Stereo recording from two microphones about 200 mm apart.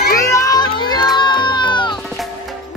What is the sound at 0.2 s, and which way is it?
Music, 15° left (ahead or behind).